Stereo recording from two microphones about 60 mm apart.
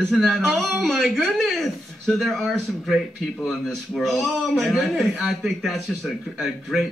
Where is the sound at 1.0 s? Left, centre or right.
Centre.